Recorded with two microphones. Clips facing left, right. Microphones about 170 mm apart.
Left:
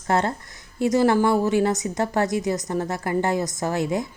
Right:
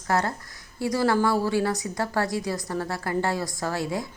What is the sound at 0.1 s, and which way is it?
A woman's voice, 25° left (ahead or behind).